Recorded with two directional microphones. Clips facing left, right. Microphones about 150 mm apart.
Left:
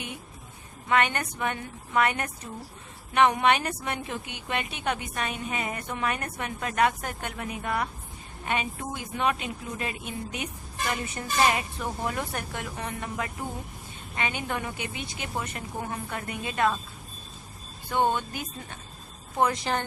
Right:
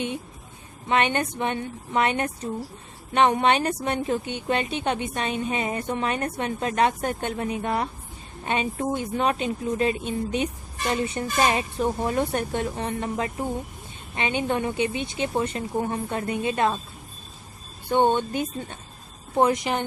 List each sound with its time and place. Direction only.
0.9 s a woman's voice: 20° right (ahead or behind)
17.9 s a woman's voice: 25° right (ahead or behind)
19.7 s speech: 15° right (ahead or behind)